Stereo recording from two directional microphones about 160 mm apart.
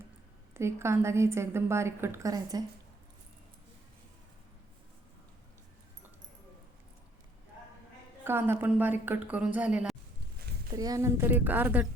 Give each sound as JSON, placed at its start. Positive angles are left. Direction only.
{"t": 0.5, "sound": "a woman's voice", "side_deg": -15}
{"t": 8.2, "sound": "a woman's voice", "side_deg": -15}
{"t": 10.7, "sound": "a woman's voice", "side_deg": -25}